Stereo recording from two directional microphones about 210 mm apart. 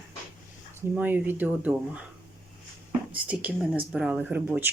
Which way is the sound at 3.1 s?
5° right (ahead or behind).